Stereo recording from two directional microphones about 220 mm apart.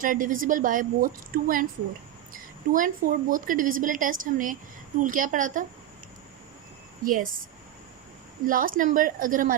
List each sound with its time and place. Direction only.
0.0 s a woman's voice: 40° right (ahead or behind)
7.0 s a woman's voice: 40° right (ahead or behind)
8.4 s a woman's voice: 40° right (ahead or behind)